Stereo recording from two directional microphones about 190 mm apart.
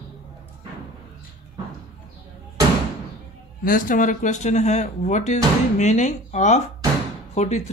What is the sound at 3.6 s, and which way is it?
Speech, 45° left (ahead or behind).